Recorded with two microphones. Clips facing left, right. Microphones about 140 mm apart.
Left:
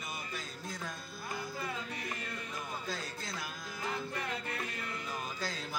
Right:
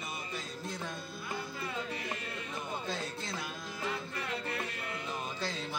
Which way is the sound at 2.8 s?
Centre (ahead or behind).